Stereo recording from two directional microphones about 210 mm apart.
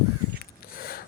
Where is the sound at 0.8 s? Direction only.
45° left (ahead or behind).